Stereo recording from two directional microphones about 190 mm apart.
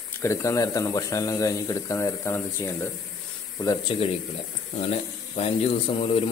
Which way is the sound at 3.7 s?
25° left (ahead or behind).